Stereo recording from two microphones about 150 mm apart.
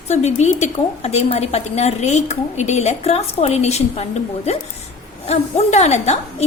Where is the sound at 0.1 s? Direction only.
50° left (ahead or behind).